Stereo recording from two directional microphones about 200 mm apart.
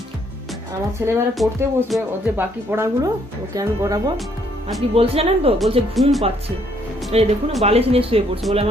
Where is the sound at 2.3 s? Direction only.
10° right (ahead or behind).